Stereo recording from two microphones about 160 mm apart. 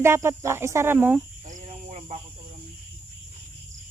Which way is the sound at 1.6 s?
40° right (ahead or behind).